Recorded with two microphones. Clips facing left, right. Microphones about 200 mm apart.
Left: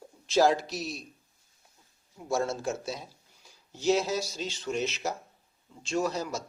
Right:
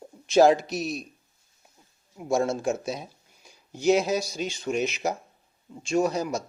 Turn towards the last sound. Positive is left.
turn(degrees=-15)  # may be behind; listen again after turning